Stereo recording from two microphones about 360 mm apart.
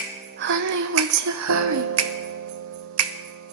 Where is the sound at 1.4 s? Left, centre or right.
Right.